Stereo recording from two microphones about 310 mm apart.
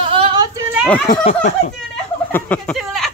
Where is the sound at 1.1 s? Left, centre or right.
Left.